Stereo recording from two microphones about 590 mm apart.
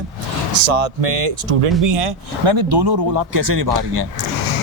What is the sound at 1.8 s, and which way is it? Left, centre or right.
A man's voice, right.